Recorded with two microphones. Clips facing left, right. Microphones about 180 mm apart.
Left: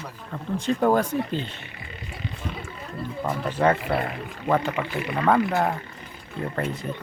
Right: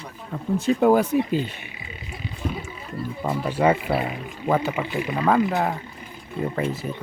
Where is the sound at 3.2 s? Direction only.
10° right (ahead or behind).